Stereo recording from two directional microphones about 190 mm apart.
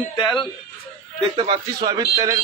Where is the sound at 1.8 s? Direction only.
15° right (ahead or behind).